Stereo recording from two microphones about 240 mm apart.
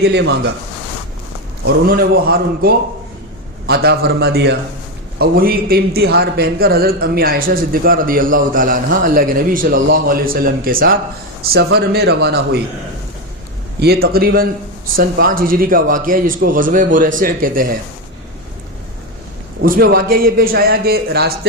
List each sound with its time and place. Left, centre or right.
0.0 s speech: right
1.6 s a man's voice: right
13.7 s a man's voice: right
19.6 s a man's voice: right